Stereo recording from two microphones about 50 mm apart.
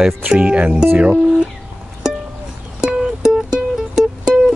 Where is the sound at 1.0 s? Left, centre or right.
Centre.